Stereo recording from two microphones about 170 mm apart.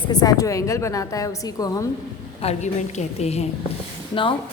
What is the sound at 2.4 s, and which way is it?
A woman's voice, 40° left (ahead or behind).